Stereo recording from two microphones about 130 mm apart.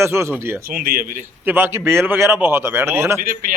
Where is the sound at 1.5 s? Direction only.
15° right (ahead or behind).